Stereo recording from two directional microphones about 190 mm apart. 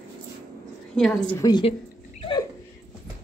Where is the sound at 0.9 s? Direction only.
Centre (ahead or behind).